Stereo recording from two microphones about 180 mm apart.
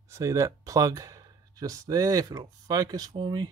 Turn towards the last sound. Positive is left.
turn(degrees=-25)  # may be behind; listen again after turning